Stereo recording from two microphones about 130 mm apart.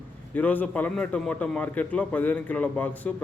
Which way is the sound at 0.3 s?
15° left (ahead or behind).